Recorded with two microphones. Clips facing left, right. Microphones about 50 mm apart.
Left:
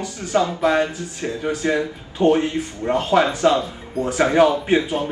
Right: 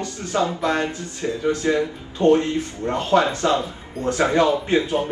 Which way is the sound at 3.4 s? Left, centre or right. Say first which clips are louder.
Left 3 dB; left.